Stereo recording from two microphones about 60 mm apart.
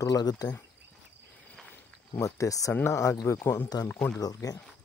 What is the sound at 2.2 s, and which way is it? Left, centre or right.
Speech, left.